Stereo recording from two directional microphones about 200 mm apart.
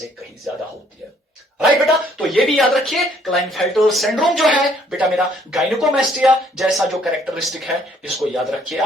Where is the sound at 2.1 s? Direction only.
Centre (ahead or behind).